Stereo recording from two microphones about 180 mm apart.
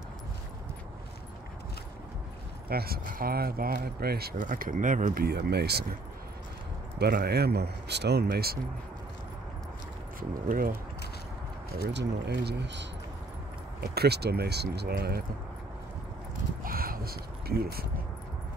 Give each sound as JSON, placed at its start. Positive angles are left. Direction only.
{"t": 2.7, "sound": "speech", "side_deg": -60}
{"t": 7.0, "sound": "speech", "side_deg": -65}
{"t": 10.5, "sound": "speech", "side_deg": -55}
{"t": 11.9, "sound": "speech", "side_deg": -75}
{"t": 13.7, "sound": "speech", "side_deg": -60}
{"t": 16.6, "sound": "speech", "side_deg": -55}